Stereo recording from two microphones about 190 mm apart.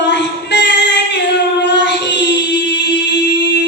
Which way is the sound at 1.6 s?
65° left (ahead or behind).